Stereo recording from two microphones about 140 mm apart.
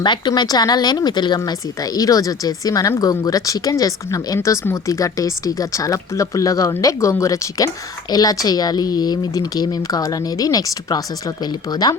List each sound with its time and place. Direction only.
0.0 s speech: 35° left (ahead or behind)